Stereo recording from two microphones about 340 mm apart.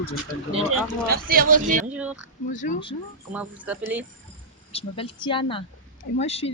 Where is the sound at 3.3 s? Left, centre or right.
Centre.